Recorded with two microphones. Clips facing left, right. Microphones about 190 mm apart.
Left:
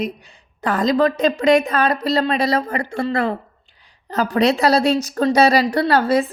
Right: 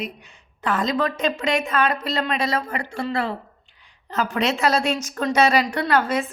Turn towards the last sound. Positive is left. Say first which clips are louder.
# left 5 dB
turn(degrees=35)  # may be behind; listen again after turning